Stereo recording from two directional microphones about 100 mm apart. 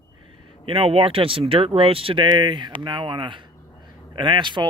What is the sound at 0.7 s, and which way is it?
Speech, 70° right (ahead or behind).